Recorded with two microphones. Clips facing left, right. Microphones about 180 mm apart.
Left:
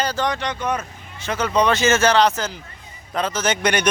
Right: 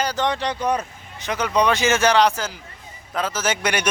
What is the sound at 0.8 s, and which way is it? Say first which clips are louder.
A man's voice: right 2 dB; 15° right (ahead or behind).